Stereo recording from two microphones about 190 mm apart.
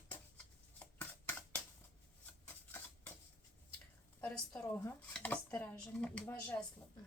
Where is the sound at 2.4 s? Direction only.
10° left (ahead or behind).